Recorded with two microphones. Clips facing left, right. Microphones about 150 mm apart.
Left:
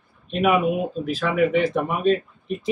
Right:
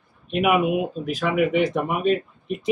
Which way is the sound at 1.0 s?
15° right (ahead or behind).